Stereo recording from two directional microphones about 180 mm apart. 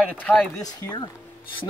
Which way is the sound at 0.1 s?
5° left (ahead or behind).